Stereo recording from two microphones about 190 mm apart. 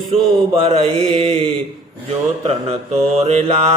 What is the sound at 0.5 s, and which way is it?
Mantra, 30° right (ahead or behind).